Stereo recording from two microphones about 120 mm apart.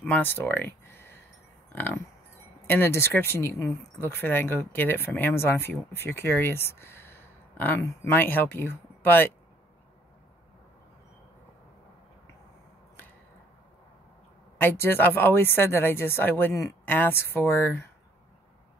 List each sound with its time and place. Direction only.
0.0 s speech: 15° left (ahead or behind)
2.6 s speech: 15° left (ahead or behind)
14.6 s speech: 15° left (ahead or behind)